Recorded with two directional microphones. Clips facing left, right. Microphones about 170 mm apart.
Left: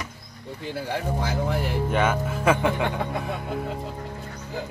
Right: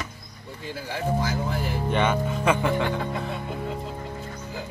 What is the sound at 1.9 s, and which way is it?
Speech, 5° left (ahead or behind).